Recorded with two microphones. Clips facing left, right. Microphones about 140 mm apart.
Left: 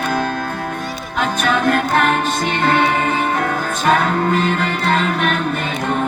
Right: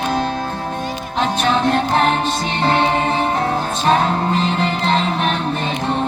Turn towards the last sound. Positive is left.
turn(degrees=-30)  # may be behind; listen again after turning